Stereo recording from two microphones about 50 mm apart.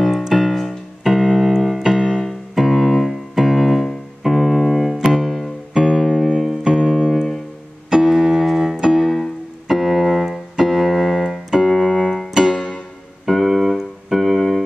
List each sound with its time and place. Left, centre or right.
0.0 s keyboard: centre
4.9 s music: centre
7.9 s keyboard: centre
9.0 s piano: centre
10.7 s keyboard: centre